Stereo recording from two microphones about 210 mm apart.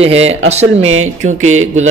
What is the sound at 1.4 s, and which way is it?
Speech, 30° right (ahead or behind).